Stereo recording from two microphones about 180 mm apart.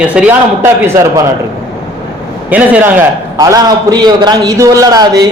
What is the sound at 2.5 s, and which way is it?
Speech, 10° right (ahead or behind).